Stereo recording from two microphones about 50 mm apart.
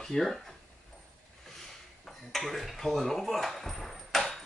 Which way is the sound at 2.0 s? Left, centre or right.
Centre.